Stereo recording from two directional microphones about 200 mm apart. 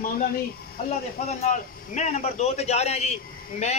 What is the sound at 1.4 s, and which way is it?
A man's voice, 35° left (ahead or behind).